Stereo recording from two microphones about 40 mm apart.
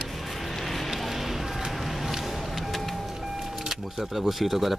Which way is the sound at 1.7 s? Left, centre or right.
Centre.